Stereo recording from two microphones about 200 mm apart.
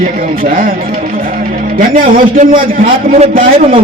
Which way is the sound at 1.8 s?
45° right (ahead or behind).